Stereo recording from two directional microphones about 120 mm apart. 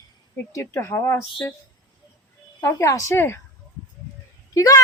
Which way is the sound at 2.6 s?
25° left (ahead or behind).